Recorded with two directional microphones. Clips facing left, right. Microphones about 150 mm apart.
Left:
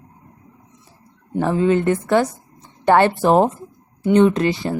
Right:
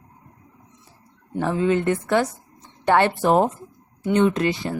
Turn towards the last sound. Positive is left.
turn(degrees=35)  # may be behind; listen again after turning